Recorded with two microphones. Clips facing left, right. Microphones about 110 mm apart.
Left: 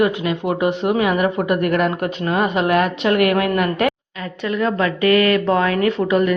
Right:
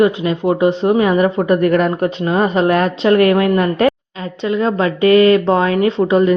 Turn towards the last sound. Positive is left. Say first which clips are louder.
# right 4 dB
turn(degrees=-25)  # may be behind; listen again after turning